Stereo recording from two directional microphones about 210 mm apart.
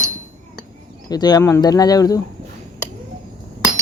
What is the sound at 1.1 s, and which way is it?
Speech, 20° left (ahead or behind).